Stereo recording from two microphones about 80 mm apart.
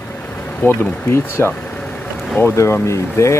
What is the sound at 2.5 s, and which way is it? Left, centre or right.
Speech, left.